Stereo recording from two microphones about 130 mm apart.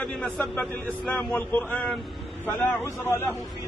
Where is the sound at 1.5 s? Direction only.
10° left (ahead or behind).